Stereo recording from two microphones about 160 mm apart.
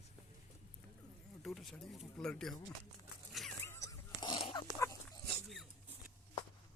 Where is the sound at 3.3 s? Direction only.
Centre (ahead or behind).